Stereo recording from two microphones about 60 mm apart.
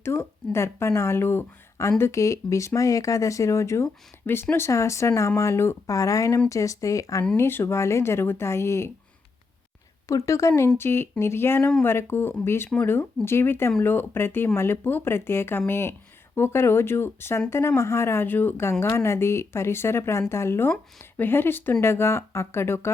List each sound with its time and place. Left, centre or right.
0.0 s speech: left
2.1 s speech: left
5.8 s speech: left
7.3 s speech: left
10.1 s speech: left
10.8 s speech: left
18.6 s speech: left